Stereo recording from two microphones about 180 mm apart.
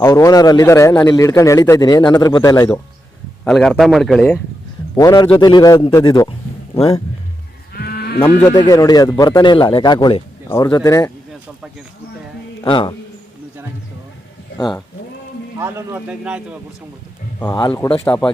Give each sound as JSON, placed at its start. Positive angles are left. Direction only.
{"t": 0.0, "sound": "a man's voice", "side_deg": 20}
{"t": 3.4, "sound": "a man's voice", "side_deg": 0}
{"t": 4.9, "sound": "a man's voice", "side_deg": 20}
{"t": 7.7, "sound": "livestock", "side_deg": 65}
{"t": 8.2, "sound": "speech", "side_deg": 10}
{"t": 8.5, "sound": "a man's voice", "side_deg": 20}
{"t": 12.6, "sound": "a man's voice", "side_deg": 25}
{"t": 15.5, "sound": "speech", "side_deg": -15}
{"t": 17.4, "sound": "a man's voice", "side_deg": 20}